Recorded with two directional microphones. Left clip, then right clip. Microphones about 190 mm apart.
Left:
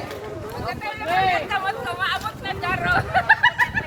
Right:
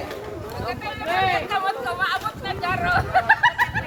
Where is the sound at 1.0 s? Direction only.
55° left (ahead or behind).